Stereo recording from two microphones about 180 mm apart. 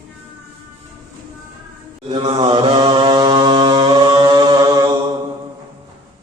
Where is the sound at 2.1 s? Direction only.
30° right (ahead or behind).